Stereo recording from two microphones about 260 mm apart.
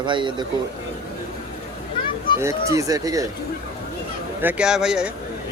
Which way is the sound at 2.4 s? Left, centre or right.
Centre.